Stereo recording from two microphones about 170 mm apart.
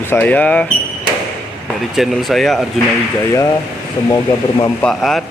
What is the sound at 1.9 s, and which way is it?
Speech, centre (ahead or behind).